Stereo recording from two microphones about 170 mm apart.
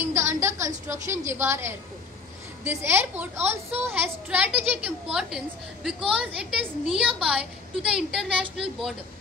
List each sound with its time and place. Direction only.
0.0 s a woman's voice: 15° right (ahead or behind)